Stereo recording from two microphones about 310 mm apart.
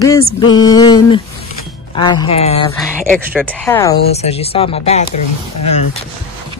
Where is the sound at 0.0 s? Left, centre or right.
Centre.